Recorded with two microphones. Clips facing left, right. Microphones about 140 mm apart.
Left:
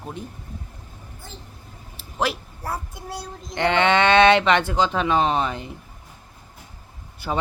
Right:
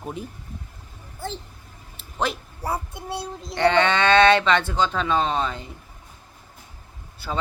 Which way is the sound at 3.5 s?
15° left (ahead or behind).